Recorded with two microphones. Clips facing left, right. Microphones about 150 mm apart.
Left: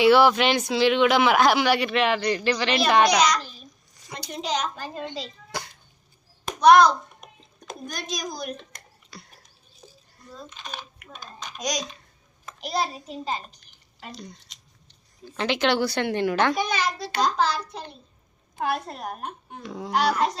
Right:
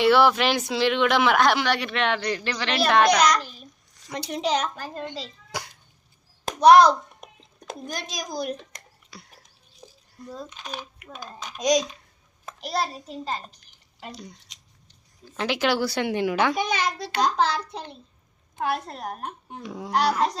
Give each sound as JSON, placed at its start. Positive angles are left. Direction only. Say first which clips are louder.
{"t": 0.0, "sound": "speech", "louder": "left 1 dB", "side_deg": 0}
{"t": 3.2, "sound": "a child's voice", "louder": "right 1 dB", "side_deg": -60}
{"t": 4.0, "sound": "a sound", "louder": "right 1 dB", "side_deg": 0}
{"t": 4.3, "sound": "speech", "louder": "right 3 dB", "side_deg": -70}
{"t": 5.5, "sound": "a sound", "louder": "even", "side_deg": -10}
{"t": 6.4, "sound": "a sound", "louder": "right 1 dB", "side_deg": -30}
{"t": 7.7, "sound": "a child's voice", "louder": "even", "side_deg": -30}
{"t": 9.1, "sound": "a sound", "louder": "left 1 dB", "side_deg": -10}
{"t": 10.2, "sound": "speech", "louder": "right 3 dB", "side_deg": -10}
{"t": 14.0, "sound": "speech", "louder": "even", "side_deg": -10}
{"t": 16.6, "sound": "a child's voice", "louder": "even", "side_deg": -20}
{"t": 18.9, "sound": "speech", "louder": "even", "side_deg": 15}
{"t": 19.6, "sound": "speech", "louder": "left 1 dB", "side_deg": -10}
{"t": 19.9, "sound": "speech", "louder": "even", "side_deg": 0}